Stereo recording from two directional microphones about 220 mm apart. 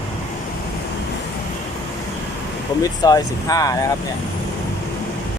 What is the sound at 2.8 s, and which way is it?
Speech, 15° left (ahead or behind).